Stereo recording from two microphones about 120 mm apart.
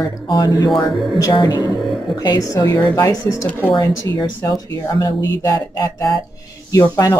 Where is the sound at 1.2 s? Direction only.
35° left (ahead or behind).